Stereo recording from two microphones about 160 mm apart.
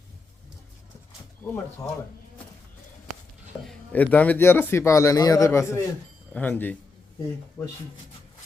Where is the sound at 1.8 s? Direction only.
20° left (ahead or behind).